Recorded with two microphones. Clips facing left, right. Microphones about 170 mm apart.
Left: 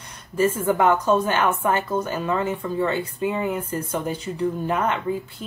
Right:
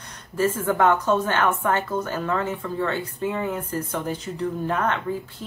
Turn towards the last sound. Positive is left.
turn(degrees=20)  # may be behind; listen again after turning